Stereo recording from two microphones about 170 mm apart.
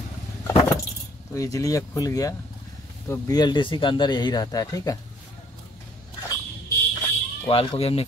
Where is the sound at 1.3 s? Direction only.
20° left (ahead or behind).